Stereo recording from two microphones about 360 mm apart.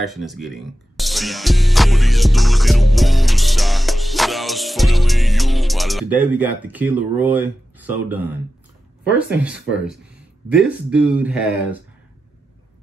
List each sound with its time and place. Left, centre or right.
0.0 s speech: centre